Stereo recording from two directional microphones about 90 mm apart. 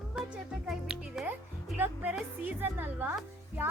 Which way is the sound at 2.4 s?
20° right (ahead or behind).